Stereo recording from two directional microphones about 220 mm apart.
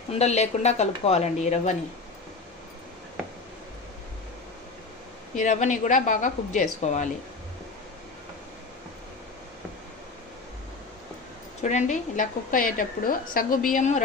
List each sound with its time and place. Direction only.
0.1 s speech: 30° left (ahead or behind)
5.3 s a woman's voice: 35° left (ahead or behind)
11.6 s a woman's voice: 35° left (ahead or behind)